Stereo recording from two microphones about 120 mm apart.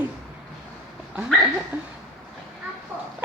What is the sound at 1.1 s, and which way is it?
Speech, 10° right (ahead or behind).